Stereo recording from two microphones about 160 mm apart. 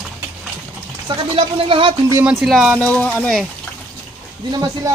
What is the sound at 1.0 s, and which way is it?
Speech, 35° right (ahead or behind).